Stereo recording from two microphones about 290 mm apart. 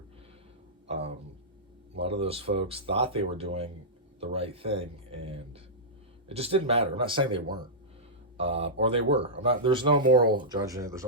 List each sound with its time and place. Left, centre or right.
2.0 s speech: centre